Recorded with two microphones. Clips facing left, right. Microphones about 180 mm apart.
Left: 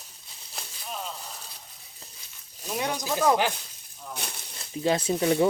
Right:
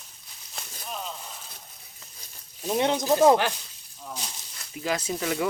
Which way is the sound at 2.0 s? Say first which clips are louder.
Left 5 dB; 35° left (ahead or behind).